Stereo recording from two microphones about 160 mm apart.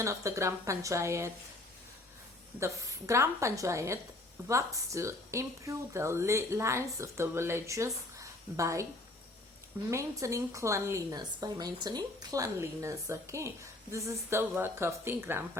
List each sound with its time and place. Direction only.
0.0 s a woman's voice: 20° right (ahead or behind)
2.6 s a woman's voice: 15° right (ahead or behind)
9.9 s a woman's voice: 20° right (ahead or behind)